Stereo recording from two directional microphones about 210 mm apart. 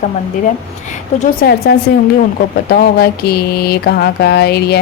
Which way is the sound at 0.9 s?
35° left (ahead or behind).